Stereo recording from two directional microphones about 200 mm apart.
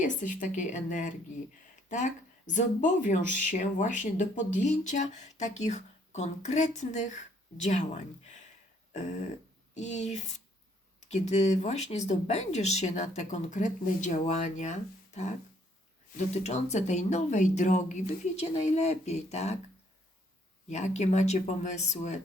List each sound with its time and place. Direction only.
0.0 s speech: 40° left (ahead or behind)
9.7 s speech: 35° left (ahead or behind)
20.7 s speech: 35° left (ahead or behind)